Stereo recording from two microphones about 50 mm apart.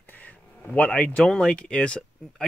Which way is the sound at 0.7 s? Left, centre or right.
Left.